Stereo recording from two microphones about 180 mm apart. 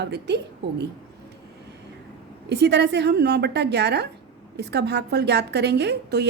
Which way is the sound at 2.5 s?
70° right (ahead or behind).